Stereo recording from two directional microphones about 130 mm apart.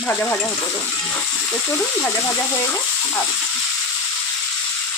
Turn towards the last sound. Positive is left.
turn(degrees=15)  # may be behind; listen again after turning